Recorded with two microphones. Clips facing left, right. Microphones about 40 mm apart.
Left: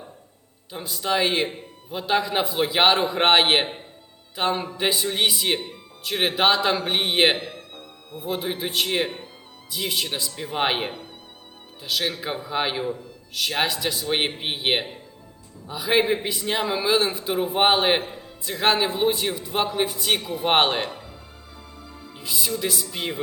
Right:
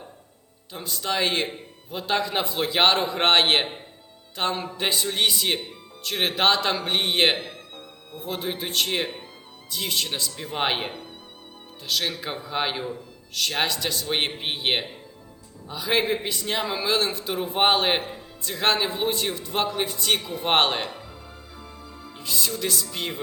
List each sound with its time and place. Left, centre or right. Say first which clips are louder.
0.7 s a man's voice: left 3 dB; centre
16.8 s a man's voice: left 3 dB; centre
20.1 s speech: left 2 dB; left
20.4 s a man's voice: left 2 dB; centre
22.1 s a man's voice: left 1 dB; centre